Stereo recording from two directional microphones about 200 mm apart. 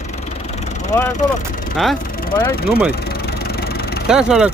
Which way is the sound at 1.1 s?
45° left (ahead or behind).